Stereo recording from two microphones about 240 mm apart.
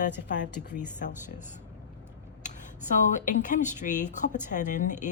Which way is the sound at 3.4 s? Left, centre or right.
Left.